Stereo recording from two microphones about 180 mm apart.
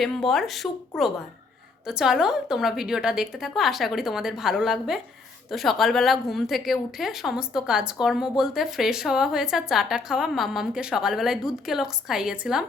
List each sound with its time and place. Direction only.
0.3 s a woman's voice: centre (ahead or behind)